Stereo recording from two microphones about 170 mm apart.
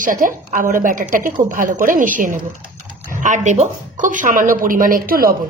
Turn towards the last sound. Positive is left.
turn(degrees=-55)  # may be behind; listen again after turning